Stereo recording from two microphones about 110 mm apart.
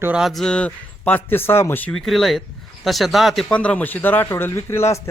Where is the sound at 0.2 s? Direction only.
Centre (ahead or behind); by 1.9 s 20° left (ahead or behind).